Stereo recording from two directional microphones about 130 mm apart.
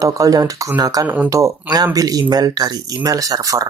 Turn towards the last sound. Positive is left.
turn(degrees=-25)  # may be behind; listen again after turning